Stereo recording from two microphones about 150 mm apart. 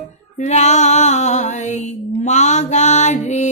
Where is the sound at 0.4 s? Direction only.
50° left (ahead or behind).